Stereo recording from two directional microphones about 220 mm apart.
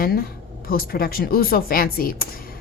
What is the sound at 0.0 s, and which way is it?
A woman's voice, 40° left (ahead or behind).